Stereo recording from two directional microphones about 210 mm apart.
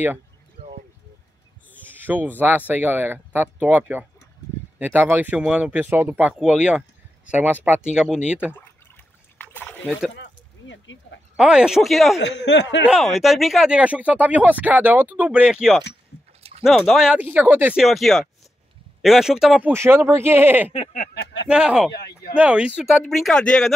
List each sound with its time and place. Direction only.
1.7 s speech: 10° right (ahead or behind)
9.4 s a sound: 10° left (ahead or behind)
10.1 s a sound: 60° left (ahead or behind)
11.3 s speech: 5° right (ahead or behind)
12.2 s speech: 55° left (ahead or behind)
13.2 s speech: centre (ahead or behind)
21.1 s speech: 60° left (ahead or behind)
21.5 s speech: 5° right (ahead or behind)